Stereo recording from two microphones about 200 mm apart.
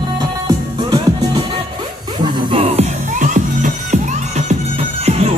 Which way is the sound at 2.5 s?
35° right (ahead or behind).